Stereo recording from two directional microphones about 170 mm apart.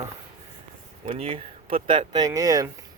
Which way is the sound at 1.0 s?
35° right (ahead or behind).